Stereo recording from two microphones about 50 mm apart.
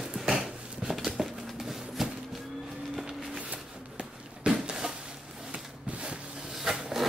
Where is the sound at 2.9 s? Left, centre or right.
Centre.